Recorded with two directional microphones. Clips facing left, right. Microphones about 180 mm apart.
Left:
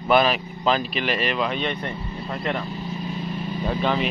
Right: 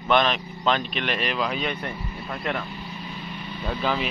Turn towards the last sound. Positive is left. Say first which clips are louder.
# left 3 dB
turn(degrees=0)  # may be behind; listen again after turning